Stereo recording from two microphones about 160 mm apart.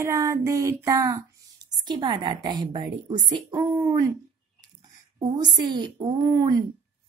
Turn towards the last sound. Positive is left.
turn(degrees=-25)  # may be behind; listen again after turning